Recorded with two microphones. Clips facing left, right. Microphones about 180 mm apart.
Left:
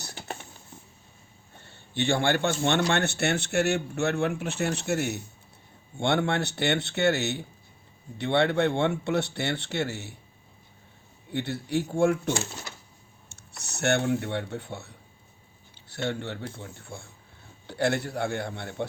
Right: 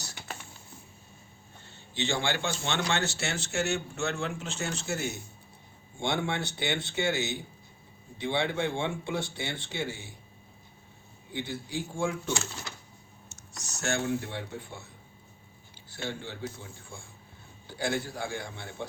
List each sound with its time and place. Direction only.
1.6 s a man's voice: 55° left (ahead or behind)
11.3 s a man's voice: 65° left (ahead or behind)